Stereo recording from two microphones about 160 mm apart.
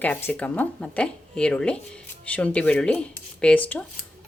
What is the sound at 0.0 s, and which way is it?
Speech, 10° left (ahead or behind).